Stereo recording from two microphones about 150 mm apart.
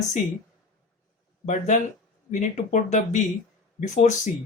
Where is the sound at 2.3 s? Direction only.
50° left (ahead or behind).